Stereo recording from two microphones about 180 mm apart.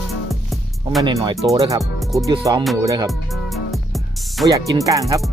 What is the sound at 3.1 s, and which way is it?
Music, centre (ahead or behind).